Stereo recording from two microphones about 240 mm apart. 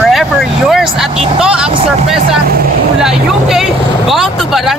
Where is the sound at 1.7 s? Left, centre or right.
Right.